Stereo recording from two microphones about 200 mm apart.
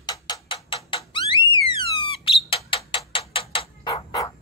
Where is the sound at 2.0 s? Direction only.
25° left (ahead or behind).